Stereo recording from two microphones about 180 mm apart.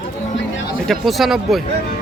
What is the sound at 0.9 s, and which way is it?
Speech, centre (ahead or behind).